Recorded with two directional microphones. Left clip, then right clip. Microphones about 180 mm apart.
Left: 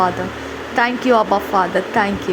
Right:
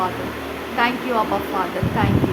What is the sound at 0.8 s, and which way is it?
Speech, 30° left (ahead or behind).